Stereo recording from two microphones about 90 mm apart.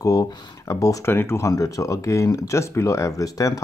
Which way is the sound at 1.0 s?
25° left (ahead or behind).